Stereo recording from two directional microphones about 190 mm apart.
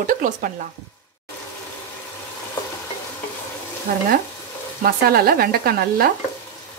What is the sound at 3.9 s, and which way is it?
Speech, 50° right (ahead or behind).